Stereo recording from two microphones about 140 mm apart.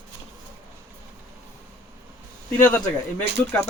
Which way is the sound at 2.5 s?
10° left (ahead or behind).